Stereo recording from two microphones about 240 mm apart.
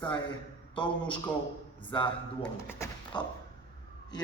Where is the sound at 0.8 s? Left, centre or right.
Left.